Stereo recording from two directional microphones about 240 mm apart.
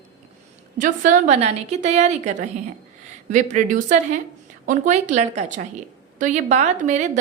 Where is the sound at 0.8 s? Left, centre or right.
Right.